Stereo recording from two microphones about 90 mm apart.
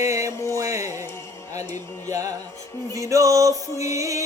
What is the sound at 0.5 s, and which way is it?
Music, 35° right (ahead or behind).